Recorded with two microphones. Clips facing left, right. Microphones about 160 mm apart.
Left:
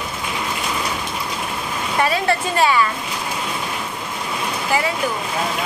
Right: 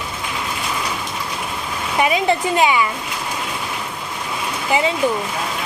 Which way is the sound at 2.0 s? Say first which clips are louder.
Right 2 dB; 15° right (ahead or behind).